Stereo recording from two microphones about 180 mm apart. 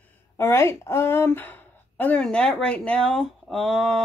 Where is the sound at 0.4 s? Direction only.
15° left (ahead or behind).